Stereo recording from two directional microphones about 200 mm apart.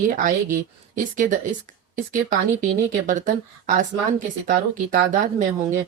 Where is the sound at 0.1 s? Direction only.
40° right (ahead or behind).